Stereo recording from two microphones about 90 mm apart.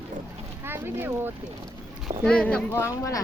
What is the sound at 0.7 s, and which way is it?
Speech, 25° right (ahead or behind).